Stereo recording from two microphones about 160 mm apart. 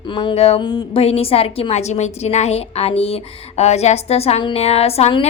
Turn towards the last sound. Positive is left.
turn(degrees=40)  # may be behind; listen again after turning